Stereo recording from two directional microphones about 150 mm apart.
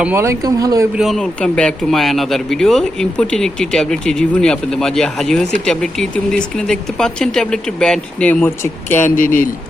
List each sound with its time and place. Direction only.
0.0 s speech: 15° right (ahead or behind)
0.9 s speech: centre (ahead or behind)